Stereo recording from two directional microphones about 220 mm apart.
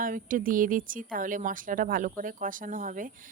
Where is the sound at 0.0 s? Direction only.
35° right (ahead or behind).